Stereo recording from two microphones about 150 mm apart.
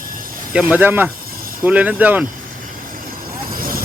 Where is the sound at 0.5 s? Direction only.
10° right (ahead or behind).